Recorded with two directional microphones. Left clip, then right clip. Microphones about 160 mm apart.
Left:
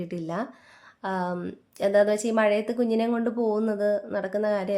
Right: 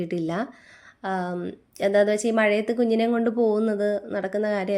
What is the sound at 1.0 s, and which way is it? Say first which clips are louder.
Speech: right 1 dB; 10° right (ahead or behind).